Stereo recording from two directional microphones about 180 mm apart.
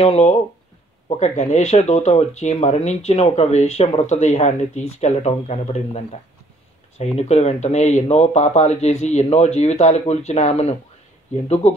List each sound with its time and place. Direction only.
0.0 s speech: 35° left (ahead or behind)
7.2 s speech: 35° left (ahead or behind)